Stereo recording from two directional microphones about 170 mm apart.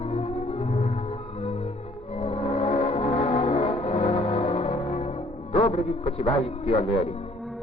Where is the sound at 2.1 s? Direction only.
40° left (ahead or behind).